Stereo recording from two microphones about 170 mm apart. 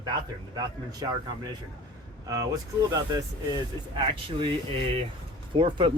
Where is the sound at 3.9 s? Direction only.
30° right (ahead or behind).